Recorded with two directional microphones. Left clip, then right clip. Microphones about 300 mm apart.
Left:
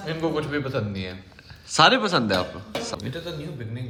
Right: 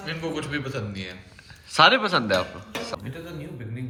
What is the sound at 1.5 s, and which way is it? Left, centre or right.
A man's voice, centre.